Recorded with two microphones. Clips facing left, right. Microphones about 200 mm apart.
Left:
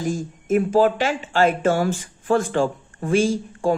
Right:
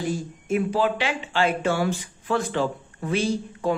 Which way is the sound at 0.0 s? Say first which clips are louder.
Left 2 dB; 45° left (ahead or behind).